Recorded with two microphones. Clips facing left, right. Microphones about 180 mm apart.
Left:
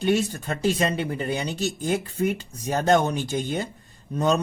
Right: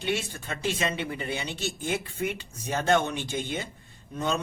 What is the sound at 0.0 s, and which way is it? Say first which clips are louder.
Speech: left 8 dB; 40° left (ahead or behind).